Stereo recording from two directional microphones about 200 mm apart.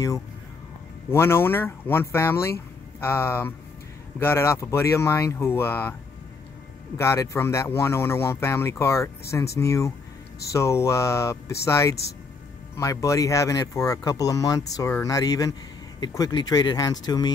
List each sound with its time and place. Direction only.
1.1 s speech: 10° left (ahead or behind)
7.0 s speech: 15° left (ahead or behind)